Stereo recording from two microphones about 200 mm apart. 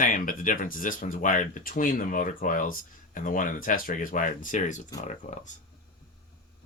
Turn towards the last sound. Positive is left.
turn(degrees=35)  # may be behind; listen again after turning